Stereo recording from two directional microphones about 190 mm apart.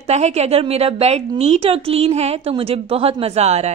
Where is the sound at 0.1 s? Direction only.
35° right (ahead or behind).